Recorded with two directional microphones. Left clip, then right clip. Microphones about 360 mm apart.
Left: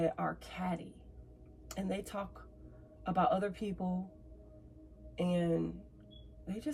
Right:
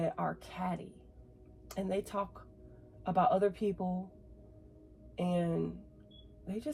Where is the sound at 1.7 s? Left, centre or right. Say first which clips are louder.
Right 4 dB; centre.